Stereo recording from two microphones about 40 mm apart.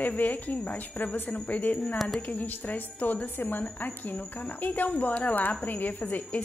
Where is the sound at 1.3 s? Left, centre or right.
Left.